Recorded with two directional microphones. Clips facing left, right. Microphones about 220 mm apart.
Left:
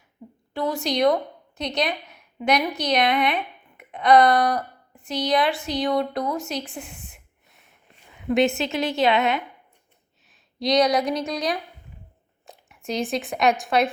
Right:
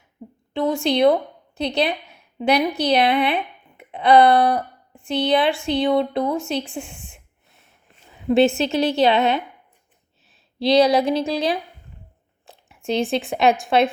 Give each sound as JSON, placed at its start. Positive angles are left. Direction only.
{"t": 0.5, "sound": "speech", "side_deg": -25}
{"t": 8.3, "sound": "a woman's voice", "side_deg": -30}
{"t": 10.6, "sound": "speech", "side_deg": -30}